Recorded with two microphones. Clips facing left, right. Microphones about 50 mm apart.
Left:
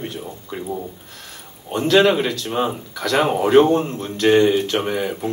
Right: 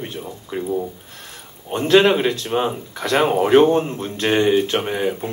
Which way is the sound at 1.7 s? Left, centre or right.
Right.